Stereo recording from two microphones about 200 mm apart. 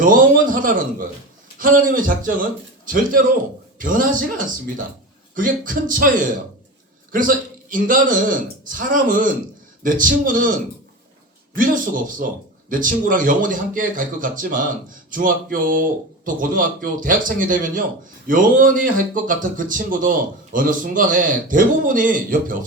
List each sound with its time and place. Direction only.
0.0 s a man's voice: 45° right (ahead or behind)
11.5 s speech: 45° right (ahead or behind)